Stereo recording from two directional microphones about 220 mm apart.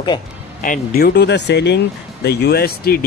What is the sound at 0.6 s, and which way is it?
Speech, 40° left (ahead or behind).